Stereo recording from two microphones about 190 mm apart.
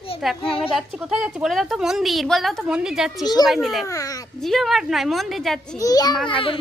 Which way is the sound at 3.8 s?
15° left (ahead or behind).